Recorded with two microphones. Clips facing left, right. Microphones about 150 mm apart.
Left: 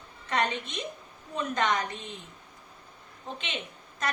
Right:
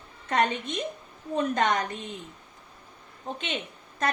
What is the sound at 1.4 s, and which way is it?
Speech, 45° right (ahead or behind).